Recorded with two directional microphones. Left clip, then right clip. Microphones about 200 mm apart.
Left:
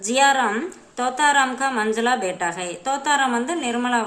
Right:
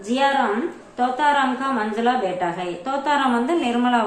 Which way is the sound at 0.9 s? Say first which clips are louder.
Left 1 dB; 25° left (ahead or behind).